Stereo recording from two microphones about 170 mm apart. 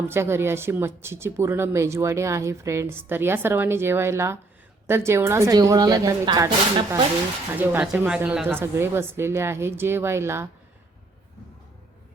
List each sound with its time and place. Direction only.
0.1 s a woman's voice: 15° right (ahead or behind)
7.5 s a woman's voice: 10° right (ahead or behind)